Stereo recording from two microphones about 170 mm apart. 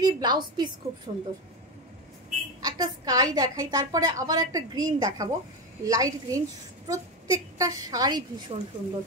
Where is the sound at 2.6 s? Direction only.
20° right (ahead or behind).